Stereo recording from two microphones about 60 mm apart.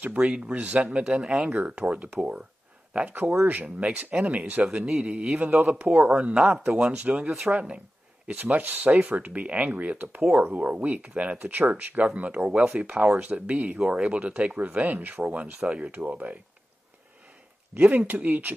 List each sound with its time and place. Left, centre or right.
0.0 s speech: centre
7.2 s speech: centre
7.5 s speech: right
17.7 s speech: right